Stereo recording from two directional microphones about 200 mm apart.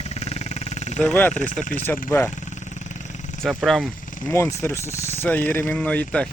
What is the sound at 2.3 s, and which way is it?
Vehicle, 35° left (ahead or behind).